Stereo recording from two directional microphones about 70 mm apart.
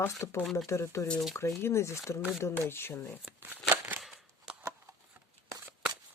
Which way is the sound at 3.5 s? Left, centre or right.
Right.